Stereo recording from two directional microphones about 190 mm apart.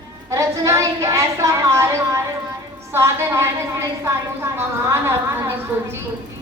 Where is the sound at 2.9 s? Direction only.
15° right (ahead or behind).